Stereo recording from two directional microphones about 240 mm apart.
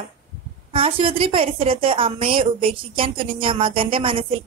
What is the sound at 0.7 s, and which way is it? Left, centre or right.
A woman's voice, right.